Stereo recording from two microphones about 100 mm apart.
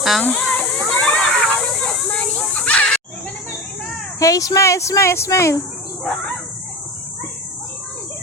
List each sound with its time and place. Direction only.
0.2 s a sound: 10° left (ahead or behind)
4.2 s speech: 35° left (ahead or behind)
6.1 s speech: 10° left (ahead or behind)